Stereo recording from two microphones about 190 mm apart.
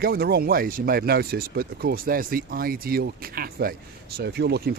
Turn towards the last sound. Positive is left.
turn(degrees=-60)  # may be behind; listen again after turning